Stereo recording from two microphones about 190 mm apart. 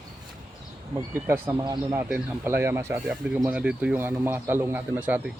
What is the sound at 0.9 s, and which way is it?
Speech, 10° right (ahead or behind).